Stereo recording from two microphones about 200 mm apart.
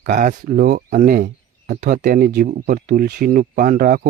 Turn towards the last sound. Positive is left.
turn(degrees=-45)  # may be behind; listen again after turning